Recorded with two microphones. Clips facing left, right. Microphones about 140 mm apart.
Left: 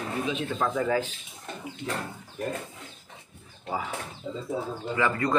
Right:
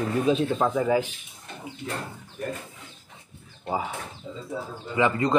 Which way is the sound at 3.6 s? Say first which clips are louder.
Right 3 dB; 25° right (ahead or behind).